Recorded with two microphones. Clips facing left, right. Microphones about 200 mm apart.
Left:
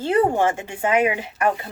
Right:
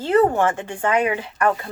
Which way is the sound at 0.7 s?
25° left (ahead or behind).